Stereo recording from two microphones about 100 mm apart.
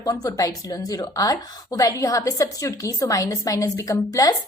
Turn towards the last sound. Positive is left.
turn(degrees=35)  # may be behind; listen again after turning